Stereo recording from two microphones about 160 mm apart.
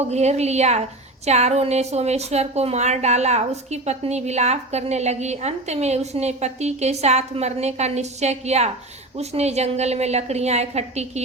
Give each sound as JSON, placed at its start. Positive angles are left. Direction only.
{"t": 0.1, "sound": "a woman's voice", "side_deg": -45}